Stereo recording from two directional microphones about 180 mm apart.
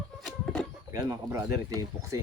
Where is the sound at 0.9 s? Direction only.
15° right (ahead or behind).